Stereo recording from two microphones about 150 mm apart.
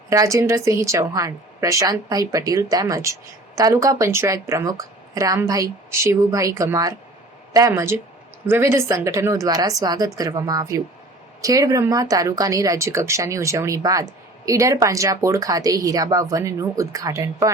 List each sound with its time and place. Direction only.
0.1 s speech: 20° right (ahead or behind)